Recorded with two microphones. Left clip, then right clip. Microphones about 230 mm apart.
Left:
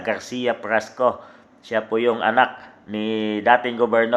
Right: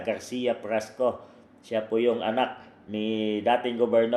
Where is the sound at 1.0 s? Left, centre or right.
Left.